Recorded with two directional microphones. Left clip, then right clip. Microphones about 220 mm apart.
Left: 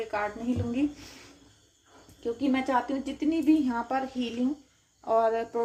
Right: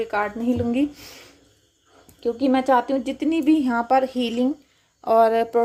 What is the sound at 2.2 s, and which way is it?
Speech, 45° right (ahead or behind).